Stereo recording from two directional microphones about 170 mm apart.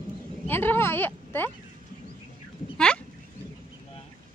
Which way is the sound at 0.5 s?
10° left (ahead or behind).